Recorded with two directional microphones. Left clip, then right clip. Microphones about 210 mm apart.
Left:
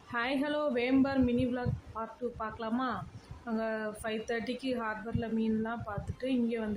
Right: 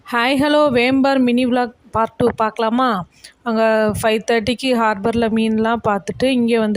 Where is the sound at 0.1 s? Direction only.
50° right (ahead or behind).